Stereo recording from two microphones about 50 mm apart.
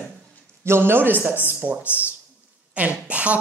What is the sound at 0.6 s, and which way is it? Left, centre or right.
A man's voice, right.